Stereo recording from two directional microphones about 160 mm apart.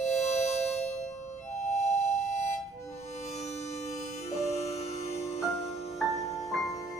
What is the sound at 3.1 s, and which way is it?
Music, 45° left (ahead or behind).